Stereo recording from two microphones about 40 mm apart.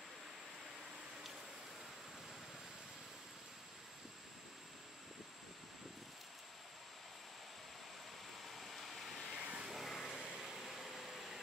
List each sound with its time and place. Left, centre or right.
8.5 s vehicle: centre
9.4 s vehicle: right
9.7 s vehicle: centre
10.4 s a sound: centre